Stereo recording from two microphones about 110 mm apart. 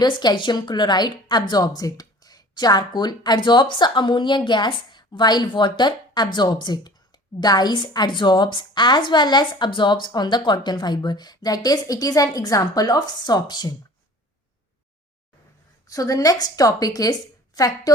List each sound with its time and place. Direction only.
0.0 s a woman's voice: 40° left (ahead or behind)
15.9 s a woman's voice: 30° left (ahead or behind)